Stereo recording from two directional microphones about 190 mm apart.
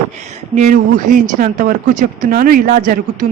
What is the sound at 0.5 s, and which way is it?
A woman's voice, 40° right (ahead or behind).